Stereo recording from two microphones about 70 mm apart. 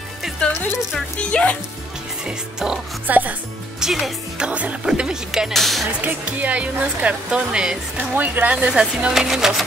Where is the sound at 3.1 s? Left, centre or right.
Right.